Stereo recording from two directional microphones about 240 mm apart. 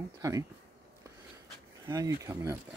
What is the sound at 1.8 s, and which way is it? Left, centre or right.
Speech, centre.